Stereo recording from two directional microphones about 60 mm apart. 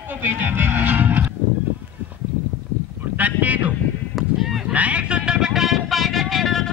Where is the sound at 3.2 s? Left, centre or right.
Right.